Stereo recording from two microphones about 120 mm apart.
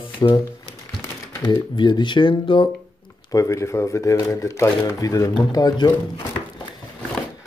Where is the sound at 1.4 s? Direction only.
40° left (ahead or behind).